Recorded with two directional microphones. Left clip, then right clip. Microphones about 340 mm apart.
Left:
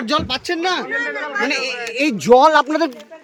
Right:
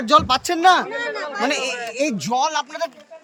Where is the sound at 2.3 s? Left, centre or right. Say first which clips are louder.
Left 14 dB; centre.